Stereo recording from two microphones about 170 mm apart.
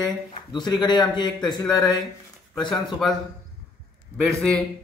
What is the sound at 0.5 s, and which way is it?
Speech, 25° left (ahead or behind).